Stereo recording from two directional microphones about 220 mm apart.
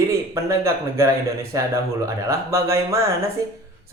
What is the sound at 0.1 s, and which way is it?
Speech, 15° right (ahead or behind).